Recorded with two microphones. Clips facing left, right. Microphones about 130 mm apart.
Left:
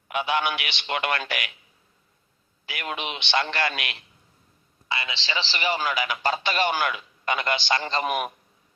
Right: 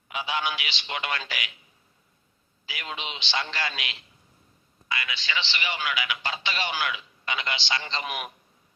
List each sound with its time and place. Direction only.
0.1 s a man's voice: 60° left (ahead or behind)
2.6 s a man's voice: 60° left (ahead or behind)
4.9 s a man's voice: 30° left (ahead or behind); by 8.3 s 50° left (ahead or behind)